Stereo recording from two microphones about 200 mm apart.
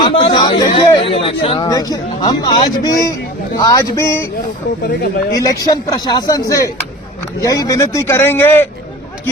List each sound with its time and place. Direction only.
0.0 s a man's voice: 25° left (ahead or behind)
5.3 s a man's voice: 20° left (ahead or behind)